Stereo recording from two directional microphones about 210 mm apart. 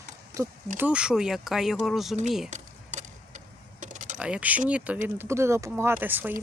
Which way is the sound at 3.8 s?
35° right (ahead or behind).